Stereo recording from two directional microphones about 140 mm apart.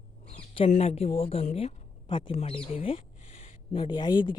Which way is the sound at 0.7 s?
50° left (ahead or behind).